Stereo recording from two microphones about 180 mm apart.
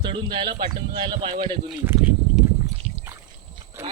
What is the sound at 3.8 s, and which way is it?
Speech, 10° right (ahead or behind).